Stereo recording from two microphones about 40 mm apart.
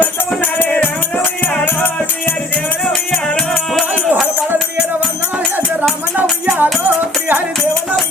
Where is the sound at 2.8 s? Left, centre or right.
Centre.